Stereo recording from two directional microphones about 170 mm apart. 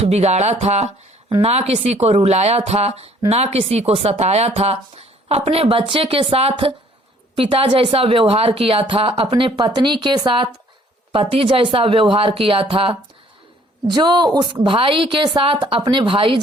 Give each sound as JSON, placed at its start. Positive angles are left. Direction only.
{"t": 0.0, "sound": "speech", "side_deg": -40}